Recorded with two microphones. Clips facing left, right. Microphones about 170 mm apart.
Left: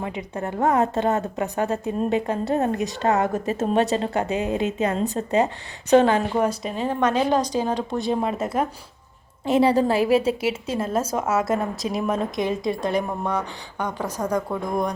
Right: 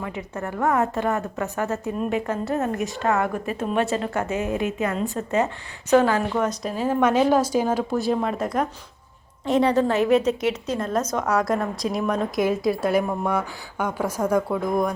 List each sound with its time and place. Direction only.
0.0 s a woman's voice: 20° left (ahead or behind)
3.6 s a woman's voice: 35° left (ahead or behind); by 6.4 s 20° left (ahead or behind)
6.5 s a woman's voice: centre (ahead or behind)